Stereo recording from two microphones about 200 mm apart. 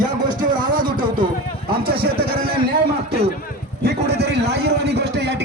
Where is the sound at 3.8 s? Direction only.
55° right (ahead or behind).